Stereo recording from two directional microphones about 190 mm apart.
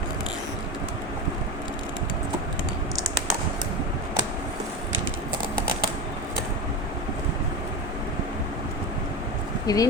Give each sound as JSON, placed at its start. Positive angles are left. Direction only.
{"t": 9.6, "sound": "speech", "side_deg": 20}